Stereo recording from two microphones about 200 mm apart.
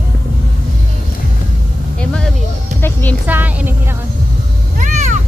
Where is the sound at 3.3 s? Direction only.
10° right (ahead or behind).